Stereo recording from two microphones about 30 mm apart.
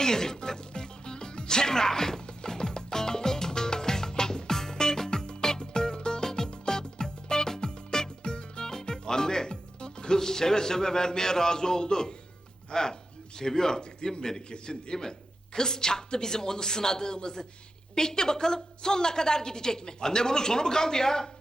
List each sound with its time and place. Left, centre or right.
0.0 s a woman's voice: centre
0.7 s music: left
10.2 s a woman's voice: centre